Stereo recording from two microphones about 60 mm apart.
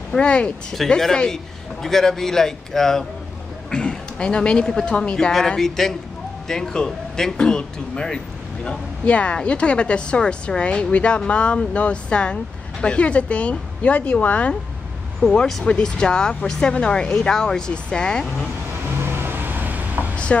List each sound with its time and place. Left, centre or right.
0.2 s speech: centre
0.7 s a woman's voice: centre; by 14.5 s left
15.2 s speech: centre
18.9 s vehicle: right
20.3 s a woman's voice: left